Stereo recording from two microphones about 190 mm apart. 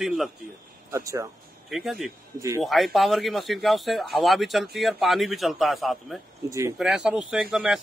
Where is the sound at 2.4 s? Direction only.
15° right (ahead or behind).